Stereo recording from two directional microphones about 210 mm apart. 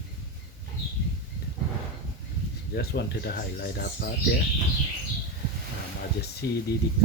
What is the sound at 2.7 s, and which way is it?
Speech, 50° left (ahead or behind).